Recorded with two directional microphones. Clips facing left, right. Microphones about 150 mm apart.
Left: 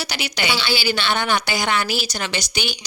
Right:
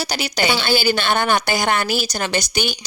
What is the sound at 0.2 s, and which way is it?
A woman's voice, 40° right (ahead or behind).